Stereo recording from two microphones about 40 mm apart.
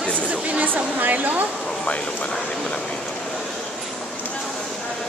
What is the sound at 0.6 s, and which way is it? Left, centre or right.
Speech, right.